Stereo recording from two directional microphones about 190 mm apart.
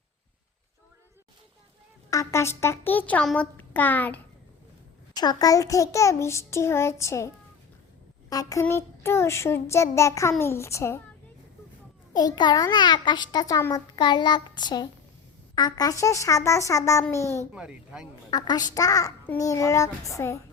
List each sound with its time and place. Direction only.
2.0 s a child's voice: 15° left (ahead or behind)
5.1 s a child's voice: 20° left (ahead or behind)
8.3 s a child's voice: 20° left (ahead or behind)
12.1 s a child's voice: 20° left (ahead or behind)
17.5 s speech: 5° right (ahead or behind)
18.3 s a child's voice: 20° left (ahead or behind)